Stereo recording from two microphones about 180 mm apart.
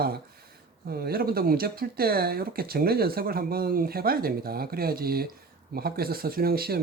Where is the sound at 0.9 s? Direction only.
60° right (ahead or behind).